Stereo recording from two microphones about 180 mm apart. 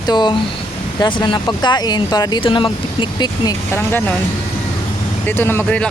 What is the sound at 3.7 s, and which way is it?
Speech, 10° left (ahead or behind).